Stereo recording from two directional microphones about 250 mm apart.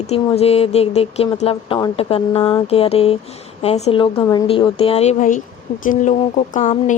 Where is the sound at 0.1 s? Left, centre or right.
Left.